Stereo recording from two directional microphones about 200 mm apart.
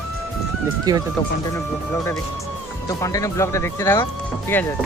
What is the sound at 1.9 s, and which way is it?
Speech, 15° left (ahead or behind).